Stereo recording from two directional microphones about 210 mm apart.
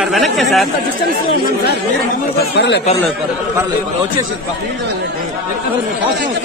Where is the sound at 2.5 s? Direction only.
55° left (ahead or behind).